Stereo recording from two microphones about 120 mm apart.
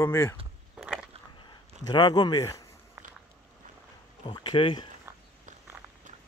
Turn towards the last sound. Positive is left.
turn(degrees=45)  # may be behind; listen again after turning